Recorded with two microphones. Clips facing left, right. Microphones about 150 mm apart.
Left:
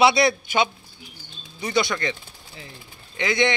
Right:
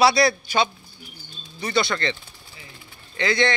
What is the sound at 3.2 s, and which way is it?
Speech, 15° left (ahead or behind).